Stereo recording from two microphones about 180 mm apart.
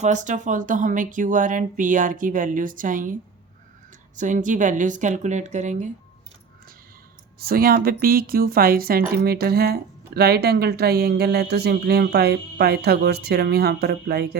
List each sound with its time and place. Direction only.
0.0 s speech: 40° right (ahead or behind)
4.2 s speech: 45° right (ahead or behind)
7.3 s speech: 55° right (ahead or behind)